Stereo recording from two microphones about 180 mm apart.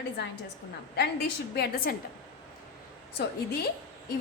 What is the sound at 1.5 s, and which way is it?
Speech, 55° left (ahead or behind).